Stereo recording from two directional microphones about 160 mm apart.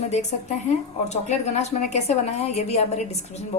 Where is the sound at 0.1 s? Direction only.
45° left (ahead or behind).